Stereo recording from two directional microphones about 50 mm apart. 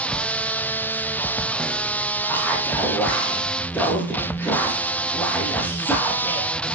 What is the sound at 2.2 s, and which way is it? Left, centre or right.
Music, left.